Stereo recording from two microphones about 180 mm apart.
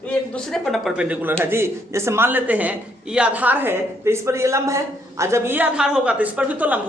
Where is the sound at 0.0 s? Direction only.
5° left (ahead or behind).